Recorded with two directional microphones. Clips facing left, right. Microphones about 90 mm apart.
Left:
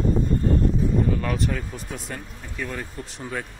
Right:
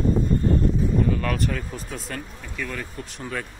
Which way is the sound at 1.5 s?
15° left (ahead or behind).